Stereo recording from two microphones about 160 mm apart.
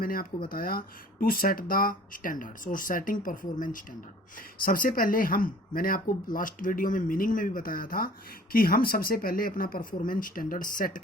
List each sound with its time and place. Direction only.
0.0 s speech: 65° left (ahead or behind)